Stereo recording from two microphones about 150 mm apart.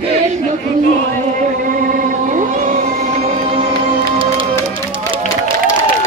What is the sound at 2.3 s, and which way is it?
Music, 55° right (ahead or behind).